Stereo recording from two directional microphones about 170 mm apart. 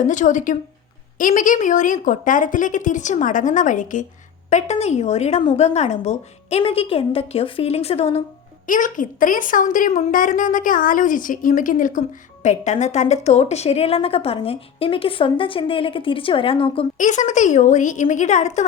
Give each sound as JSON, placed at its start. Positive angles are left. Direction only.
{"t": 0.0, "sound": "a woman's voice", "side_deg": 50}
{"t": 8.6, "sound": "a woman's voice", "side_deg": 50}
{"t": 17.0, "sound": "a woman's voice", "side_deg": 45}